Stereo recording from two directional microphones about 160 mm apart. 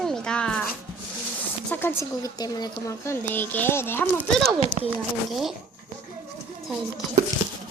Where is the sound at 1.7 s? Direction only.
15° left (ahead or behind).